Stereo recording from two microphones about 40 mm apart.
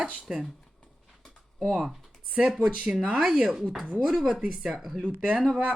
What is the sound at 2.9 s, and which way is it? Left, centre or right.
Speech, right.